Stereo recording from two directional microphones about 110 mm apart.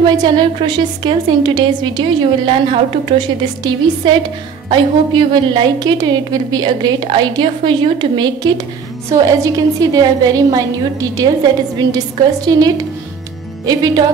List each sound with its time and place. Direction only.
0.0 s a woman's voice: 40° right (ahead or behind)